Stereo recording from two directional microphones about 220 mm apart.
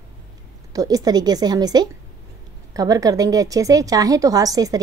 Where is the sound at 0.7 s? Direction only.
15° right (ahead or behind).